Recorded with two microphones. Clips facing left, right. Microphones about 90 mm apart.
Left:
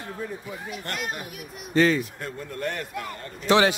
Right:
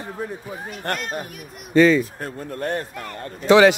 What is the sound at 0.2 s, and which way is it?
Speech, 45° right (ahead or behind).